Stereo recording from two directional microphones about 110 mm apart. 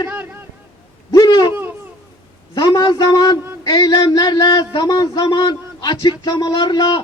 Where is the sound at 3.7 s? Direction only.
35° left (ahead or behind).